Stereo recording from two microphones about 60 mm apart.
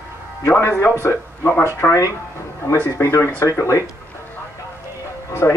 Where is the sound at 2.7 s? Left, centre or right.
Left.